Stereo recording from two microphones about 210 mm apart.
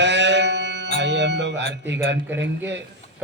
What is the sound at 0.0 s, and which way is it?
Music, 55° right (ahead or behind).